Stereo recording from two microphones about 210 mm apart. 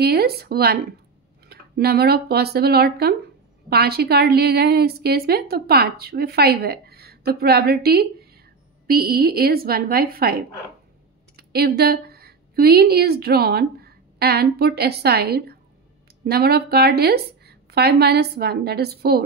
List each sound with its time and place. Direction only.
0.0 s a woman's voice: 50° right (ahead or behind)